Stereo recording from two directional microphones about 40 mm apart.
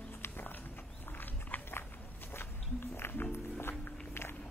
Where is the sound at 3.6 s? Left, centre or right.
Left.